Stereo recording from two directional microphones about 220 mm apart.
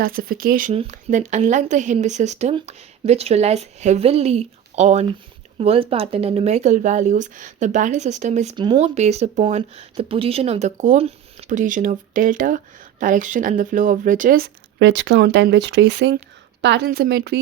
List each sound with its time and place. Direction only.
0.0 s speech: 40° right (ahead or behind)
0.7 s a woman's voice: 30° right (ahead or behind); by 17.3 s 50° right (ahead or behind)